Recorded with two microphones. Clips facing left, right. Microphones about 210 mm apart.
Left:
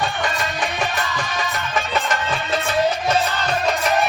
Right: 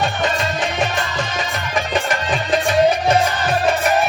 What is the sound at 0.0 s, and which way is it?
Music, 25° right (ahead or behind).